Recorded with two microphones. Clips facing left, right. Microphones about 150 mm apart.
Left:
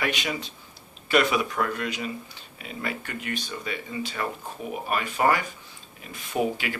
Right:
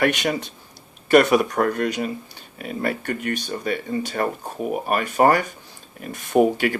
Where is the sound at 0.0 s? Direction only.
55° right (ahead or behind).